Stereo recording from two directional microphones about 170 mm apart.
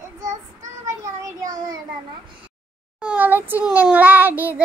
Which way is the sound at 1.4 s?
25° right (ahead or behind).